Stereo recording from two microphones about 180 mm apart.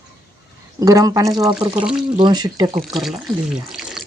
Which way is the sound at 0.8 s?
20° right (ahead or behind).